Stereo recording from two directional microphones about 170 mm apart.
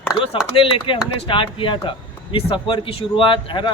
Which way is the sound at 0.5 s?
30° left (ahead or behind).